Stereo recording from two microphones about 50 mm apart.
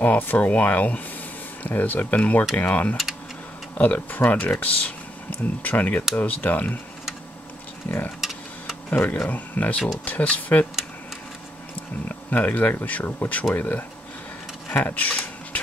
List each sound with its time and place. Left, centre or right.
0.0 s speech: left
8.2 s tick-tock: centre
9.0 s speech: left
12.1 s speech: left
14.7 s a sound: left